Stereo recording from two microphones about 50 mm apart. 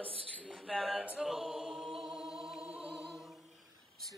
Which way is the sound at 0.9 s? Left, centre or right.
Centre.